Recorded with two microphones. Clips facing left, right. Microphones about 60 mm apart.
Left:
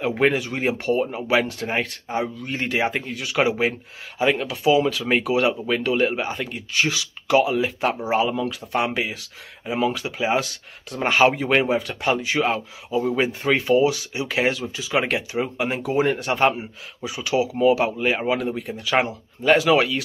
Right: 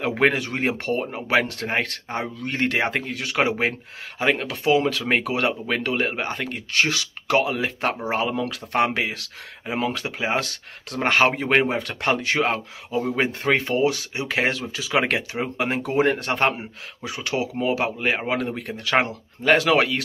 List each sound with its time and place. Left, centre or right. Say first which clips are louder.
0.2 s speech: even; right
6.2 s speech: even; right
9.7 s speech: left 2 dB; right
11.8 s speech: even; right
14.7 s speech: even; right
18.6 s speech: even; right